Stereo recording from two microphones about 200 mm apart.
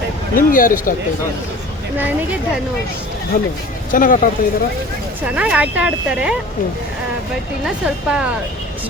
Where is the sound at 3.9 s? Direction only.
40° left (ahead or behind).